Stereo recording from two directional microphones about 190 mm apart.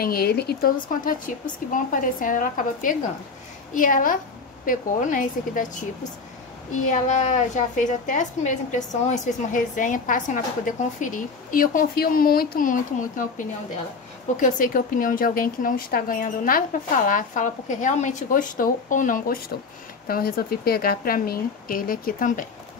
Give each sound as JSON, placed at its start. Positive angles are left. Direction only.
{"t": 0.0, "sound": "a woman's voice", "side_deg": 50}
{"t": 6.9, "sound": "a woman's voice", "side_deg": 40}